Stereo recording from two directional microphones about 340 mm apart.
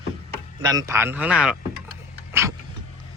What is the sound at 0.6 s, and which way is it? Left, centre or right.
Speech, centre.